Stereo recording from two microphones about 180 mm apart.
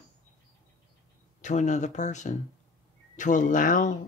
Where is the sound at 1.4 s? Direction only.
40° left (ahead or behind).